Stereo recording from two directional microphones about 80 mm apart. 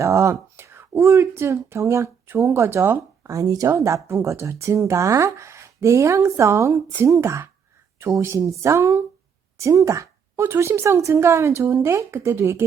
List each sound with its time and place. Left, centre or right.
0.0 s speech: right
3.3 s speech: right